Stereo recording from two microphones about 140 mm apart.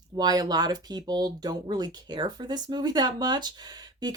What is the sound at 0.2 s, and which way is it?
Speech, 30° right (ahead or behind).